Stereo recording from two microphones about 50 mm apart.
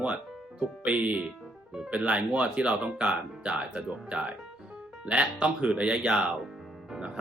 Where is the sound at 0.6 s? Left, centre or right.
Right.